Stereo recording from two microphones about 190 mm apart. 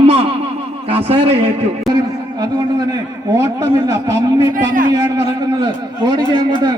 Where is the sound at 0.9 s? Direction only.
30° right (ahead or behind).